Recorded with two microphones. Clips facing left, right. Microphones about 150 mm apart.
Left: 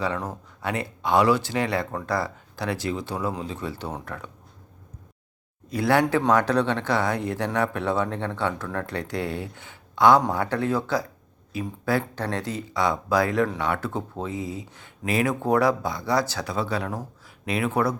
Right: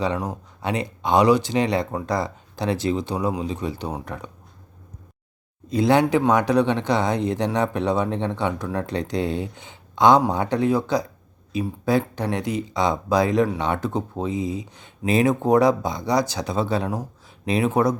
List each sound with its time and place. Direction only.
0.0 s speech: 15° right (ahead or behind)
5.6 s speech: 20° right (ahead or behind)